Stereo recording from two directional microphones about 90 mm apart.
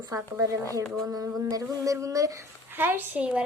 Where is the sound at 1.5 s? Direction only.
40° right (ahead or behind).